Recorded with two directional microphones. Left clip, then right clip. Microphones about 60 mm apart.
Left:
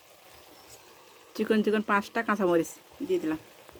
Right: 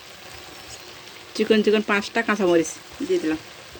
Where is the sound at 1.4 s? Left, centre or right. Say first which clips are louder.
Right 7 dB; centre.